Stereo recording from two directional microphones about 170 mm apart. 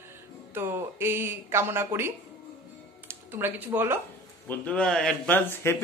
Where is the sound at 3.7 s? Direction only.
15° right (ahead or behind).